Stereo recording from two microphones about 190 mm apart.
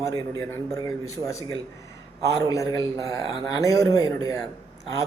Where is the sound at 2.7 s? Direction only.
20° left (ahead or behind).